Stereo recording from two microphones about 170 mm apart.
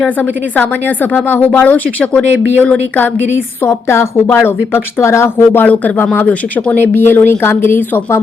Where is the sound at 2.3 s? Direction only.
90° right.